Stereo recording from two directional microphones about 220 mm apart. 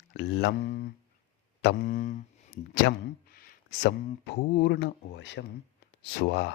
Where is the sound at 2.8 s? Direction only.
45° left (ahead or behind).